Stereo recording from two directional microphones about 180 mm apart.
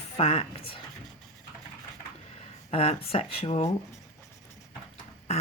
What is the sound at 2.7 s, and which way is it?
Speech, 35° left (ahead or behind).